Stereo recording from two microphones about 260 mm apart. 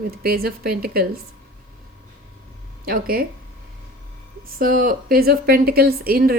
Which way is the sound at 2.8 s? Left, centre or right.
Right.